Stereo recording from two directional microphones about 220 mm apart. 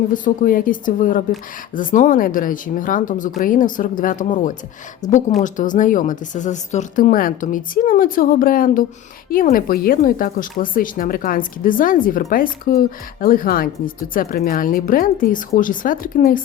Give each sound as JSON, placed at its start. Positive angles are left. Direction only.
{"t": 0.1, "sound": "speech", "side_deg": 40}